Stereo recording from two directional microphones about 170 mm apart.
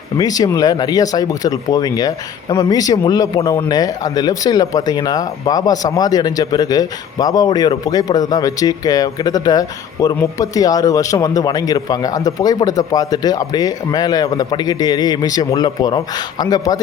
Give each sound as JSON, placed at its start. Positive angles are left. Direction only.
{"t": 0.2, "sound": "speech", "side_deg": 20}